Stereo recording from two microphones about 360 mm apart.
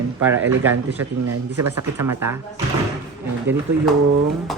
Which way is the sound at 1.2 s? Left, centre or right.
Right.